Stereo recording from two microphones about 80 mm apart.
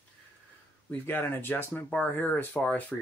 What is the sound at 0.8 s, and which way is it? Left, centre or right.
Speech, left.